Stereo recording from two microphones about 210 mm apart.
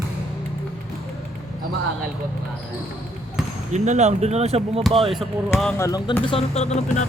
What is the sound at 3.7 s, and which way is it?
Speech, 35° right (ahead or behind).